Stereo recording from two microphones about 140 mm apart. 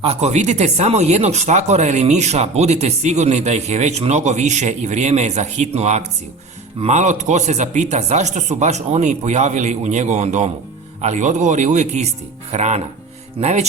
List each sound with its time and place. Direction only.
0.0 s a man's voice: 45° right (ahead or behind)